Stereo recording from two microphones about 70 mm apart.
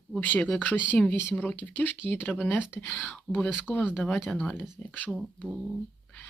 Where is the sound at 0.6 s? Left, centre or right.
Left.